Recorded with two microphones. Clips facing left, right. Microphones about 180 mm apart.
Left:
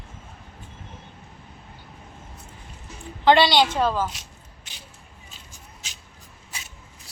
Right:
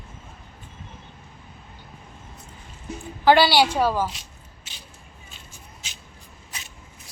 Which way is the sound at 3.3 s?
5° right (ahead or behind).